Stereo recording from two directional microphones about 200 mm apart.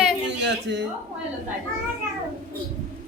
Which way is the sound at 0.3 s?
60° right (ahead or behind).